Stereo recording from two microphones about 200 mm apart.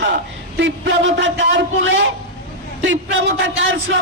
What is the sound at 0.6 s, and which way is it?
Speech, 65° right (ahead or behind).